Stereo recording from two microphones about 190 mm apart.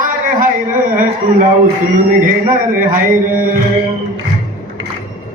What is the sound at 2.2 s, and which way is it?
Speech, 45° right (ahead or behind).